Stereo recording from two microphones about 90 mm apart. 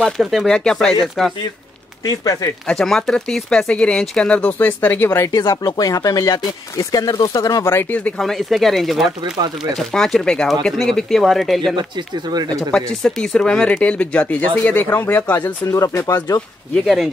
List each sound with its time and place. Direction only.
0.0 s speech: centre (ahead or behind)
2.0 s speech: 40° left (ahead or behind)
2.6 s speech: 5° left (ahead or behind); by 5.3 s 25° left (ahead or behind)
5.3 s speech: 50° left (ahead or behind)
7.6 s speech: 25° left (ahead or behind)
8.2 s speech: centre (ahead or behind); by 15.5 s 20° left (ahead or behind)
15.6 s speech: 35° left (ahead or behind)
16.7 s speech: centre (ahead or behind)